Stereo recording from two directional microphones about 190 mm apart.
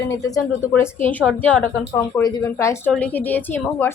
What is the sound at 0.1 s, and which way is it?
Speech, 15° left (ahead or behind).